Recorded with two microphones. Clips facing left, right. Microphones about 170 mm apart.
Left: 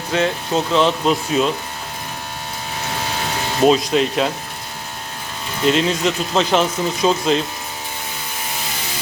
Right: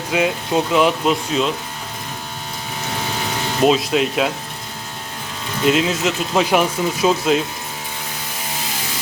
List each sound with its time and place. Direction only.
0.1 s speech: 10° right (ahead or behind)
1.3 s speech: 5° left (ahead or behind)
3.6 s speech: centre (ahead or behind)
5.6 s speech: 5° right (ahead or behind)